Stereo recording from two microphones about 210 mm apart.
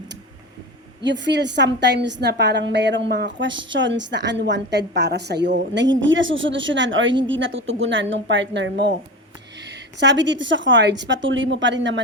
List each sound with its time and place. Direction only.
1.0 s a woman's voice: 55° right (ahead or behind)